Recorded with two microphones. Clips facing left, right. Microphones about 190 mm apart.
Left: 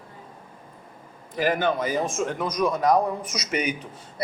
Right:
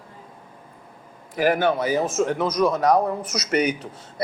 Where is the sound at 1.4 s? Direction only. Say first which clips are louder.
Right 3 dB; 10° right (ahead or behind).